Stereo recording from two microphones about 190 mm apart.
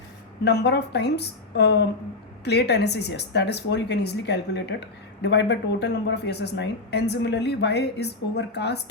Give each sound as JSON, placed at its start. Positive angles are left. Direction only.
{"t": 0.4, "sound": "speech", "side_deg": 60}